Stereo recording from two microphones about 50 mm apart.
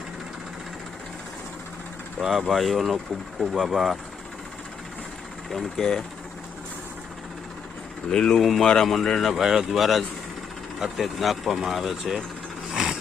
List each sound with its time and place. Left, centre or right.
2.1 s speech: centre
5.5 s speech: centre
8.1 s a man's voice: centre
12.7 s a sound: centre